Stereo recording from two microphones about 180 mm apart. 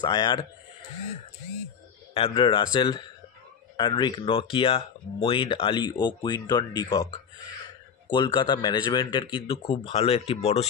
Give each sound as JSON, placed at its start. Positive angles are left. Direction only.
{"t": 0.0, "sound": "speech", "side_deg": 25}
{"t": 2.1, "sound": "speech", "side_deg": 30}
{"t": 8.1, "sound": "speech", "side_deg": 25}